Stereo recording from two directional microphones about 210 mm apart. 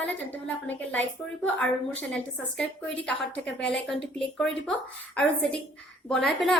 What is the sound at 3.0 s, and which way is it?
A woman's voice, 5° left (ahead or behind).